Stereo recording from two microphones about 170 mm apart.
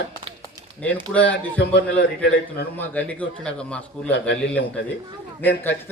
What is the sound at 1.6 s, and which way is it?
Speech, 90° left.